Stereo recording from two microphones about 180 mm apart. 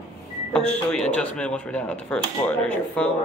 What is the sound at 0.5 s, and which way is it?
Speech, 5° left (ahead or behind).